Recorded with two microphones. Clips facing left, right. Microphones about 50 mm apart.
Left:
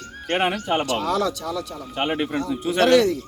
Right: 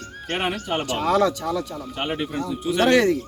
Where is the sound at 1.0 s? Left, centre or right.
Right.